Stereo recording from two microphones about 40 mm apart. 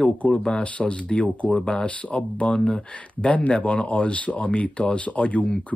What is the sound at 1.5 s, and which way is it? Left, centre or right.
Speech, centre.